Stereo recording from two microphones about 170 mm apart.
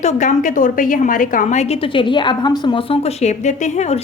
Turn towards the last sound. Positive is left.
turn(degrees=45)  # may be behind; listen again after turning